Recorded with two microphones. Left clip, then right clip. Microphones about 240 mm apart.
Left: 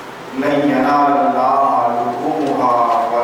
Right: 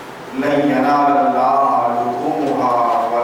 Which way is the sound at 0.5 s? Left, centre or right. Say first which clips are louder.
Even; centre.